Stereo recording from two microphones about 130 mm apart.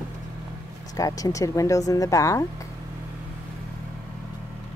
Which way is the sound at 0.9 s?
25° left (ahead or behind).